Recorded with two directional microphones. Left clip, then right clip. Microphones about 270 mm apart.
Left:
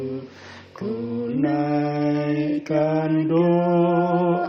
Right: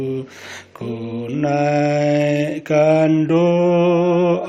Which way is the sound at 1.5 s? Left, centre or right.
Right.